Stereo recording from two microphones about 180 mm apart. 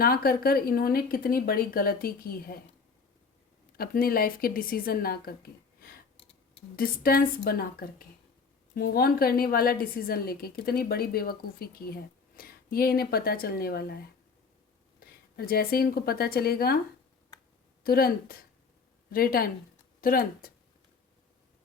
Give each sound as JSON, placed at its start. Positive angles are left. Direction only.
{"t": 0.0, "sound": "a woman's voice", "side_deg": 55}
{"t": 3.8, "sound": "a woman's voice", "side_deg": 55}
{"t": 17.8, "sound": "a woman's voice", "side_deg": 55}